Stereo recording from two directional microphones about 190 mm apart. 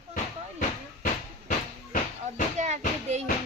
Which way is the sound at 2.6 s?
40° right (ahead or behind).